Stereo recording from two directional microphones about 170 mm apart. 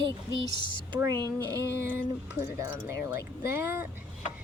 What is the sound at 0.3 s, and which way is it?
Speech, 25° left (ahead or behind).